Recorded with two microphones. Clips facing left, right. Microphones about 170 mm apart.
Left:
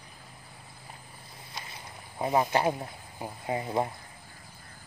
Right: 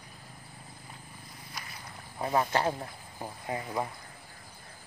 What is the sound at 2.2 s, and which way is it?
Speech, 15° left (ahead or behind).